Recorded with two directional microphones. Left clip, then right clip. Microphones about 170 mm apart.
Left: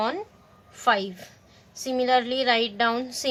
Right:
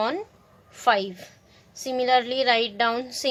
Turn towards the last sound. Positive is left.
turn(degrees=-25)  # may be behind; listen again after turning